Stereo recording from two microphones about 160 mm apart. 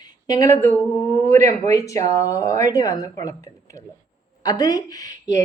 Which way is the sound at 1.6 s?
20° left (ahead or behind).